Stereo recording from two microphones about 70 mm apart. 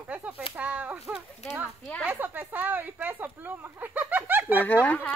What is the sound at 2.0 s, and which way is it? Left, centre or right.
Speech, right.